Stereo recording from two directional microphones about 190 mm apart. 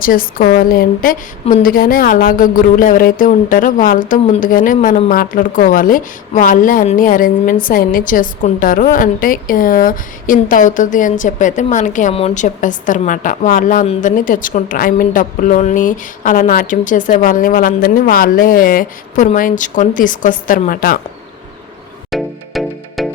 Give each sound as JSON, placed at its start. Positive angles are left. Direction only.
{"t": 0.0, "sound": "speech", "side_deg": 50}
{"t": 22.1, "sound": "music", "side_deg": 0}